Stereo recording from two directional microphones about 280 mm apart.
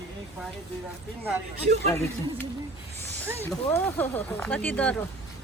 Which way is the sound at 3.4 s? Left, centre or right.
Centre.